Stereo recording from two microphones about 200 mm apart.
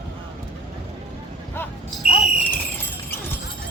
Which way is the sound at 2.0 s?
30° left (ahead or behind).